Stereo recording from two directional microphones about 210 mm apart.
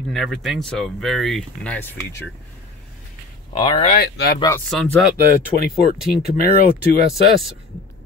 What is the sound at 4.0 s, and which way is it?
Speech, 50° left (ahead or behind).